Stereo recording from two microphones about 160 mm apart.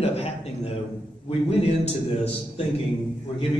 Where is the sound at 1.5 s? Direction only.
40° left (ahead or behind).